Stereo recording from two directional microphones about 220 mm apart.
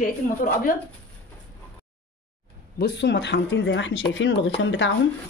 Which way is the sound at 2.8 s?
50° left (ahead or behind).